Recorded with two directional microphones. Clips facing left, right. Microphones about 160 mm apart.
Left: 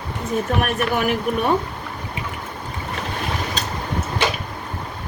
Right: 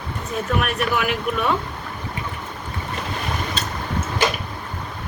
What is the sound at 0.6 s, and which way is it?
Speech, 45° left (ahead or behind).